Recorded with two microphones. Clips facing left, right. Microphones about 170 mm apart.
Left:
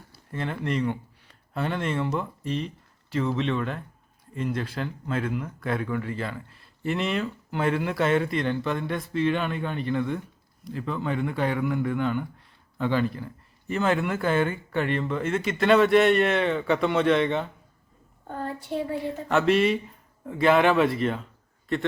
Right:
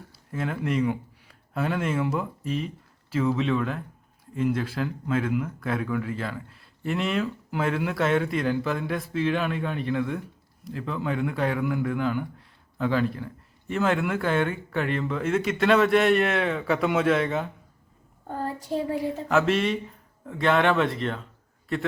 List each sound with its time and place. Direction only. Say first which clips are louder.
0.3 s speech: right 1 dB; 5° right (ahead or behind)
18.7 s speech: right 1 dB; 35° right (ahead or behind)
19.3 s speech: left 2 dB; centre (ahead or behind)